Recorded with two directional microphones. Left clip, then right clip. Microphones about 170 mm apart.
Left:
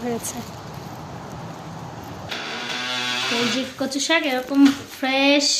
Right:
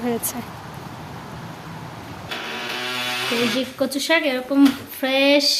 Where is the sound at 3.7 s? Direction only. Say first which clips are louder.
Right 2 dB; 15° right (ahead or behind).